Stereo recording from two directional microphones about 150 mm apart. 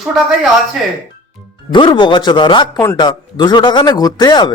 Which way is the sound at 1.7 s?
30° left (ahead or behind).